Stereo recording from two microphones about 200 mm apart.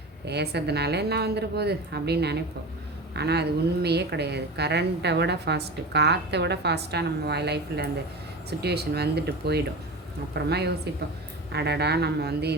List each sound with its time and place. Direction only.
0.3 s a woman's voice: 55° right (ahead or behind)